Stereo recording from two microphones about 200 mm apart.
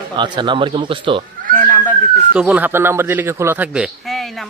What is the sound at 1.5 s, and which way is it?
Speech, 10° left (ahead or behind).